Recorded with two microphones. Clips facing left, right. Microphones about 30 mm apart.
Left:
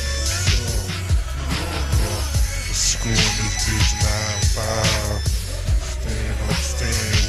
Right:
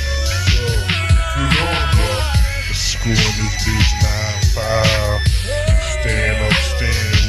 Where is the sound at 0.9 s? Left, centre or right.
Right.